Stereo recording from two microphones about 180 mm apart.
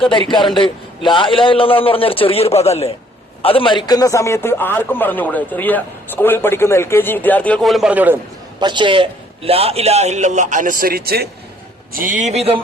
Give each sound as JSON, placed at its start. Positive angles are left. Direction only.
{"t": 0.0, "sound": "a man's voice", "side_deg": 25}
{"t": 8.6, "sound": "a man's voice", "side_deg": -25}
{"t": 11.9, "sound": "a man's voice", "side_deg": -45}